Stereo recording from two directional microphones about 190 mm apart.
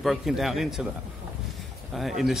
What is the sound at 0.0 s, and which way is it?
Speech, centre (ahead or behind).